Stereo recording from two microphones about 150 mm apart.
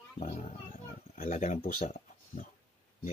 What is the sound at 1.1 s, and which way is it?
Speech, 60° left (ahead or behind).